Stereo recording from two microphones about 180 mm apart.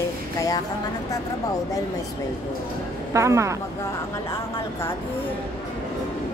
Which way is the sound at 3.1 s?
15° right (ahead or behind).